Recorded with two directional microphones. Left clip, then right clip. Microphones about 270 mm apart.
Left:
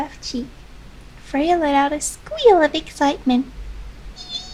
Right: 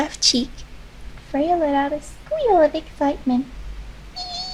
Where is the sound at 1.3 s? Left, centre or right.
Centre.